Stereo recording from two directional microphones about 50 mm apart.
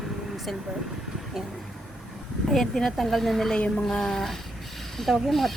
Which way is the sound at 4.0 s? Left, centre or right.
Centre.